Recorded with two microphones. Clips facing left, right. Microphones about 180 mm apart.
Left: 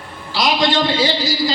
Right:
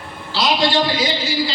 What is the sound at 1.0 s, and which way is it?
Speech, 40° left (ahead or behind).